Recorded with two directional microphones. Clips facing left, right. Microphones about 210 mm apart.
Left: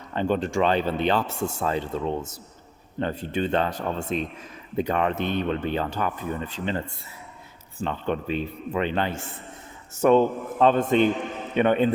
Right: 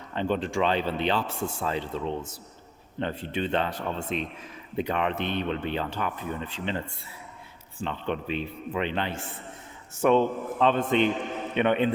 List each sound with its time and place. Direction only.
0.1 s speech: 45° left (ahead or behind)
7.8 s a man's voice: 40° left (ahead or behind)